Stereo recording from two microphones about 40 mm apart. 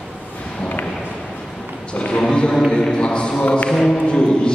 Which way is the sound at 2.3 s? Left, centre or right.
Centre.